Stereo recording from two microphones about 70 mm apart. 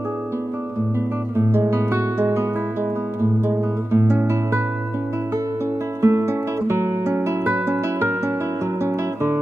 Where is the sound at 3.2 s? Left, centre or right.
Right.